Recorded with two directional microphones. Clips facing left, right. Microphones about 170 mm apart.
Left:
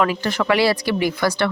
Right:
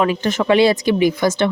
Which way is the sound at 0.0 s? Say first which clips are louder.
Right 2 dB; 20° right (ahead or behind).